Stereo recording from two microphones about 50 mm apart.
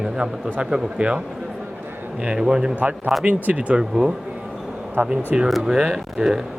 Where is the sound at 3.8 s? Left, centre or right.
Centre.